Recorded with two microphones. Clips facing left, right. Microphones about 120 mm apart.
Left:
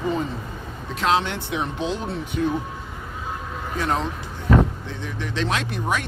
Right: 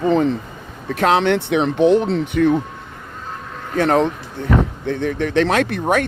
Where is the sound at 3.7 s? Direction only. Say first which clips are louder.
Right 9 dB; 65° right (ahead or behind).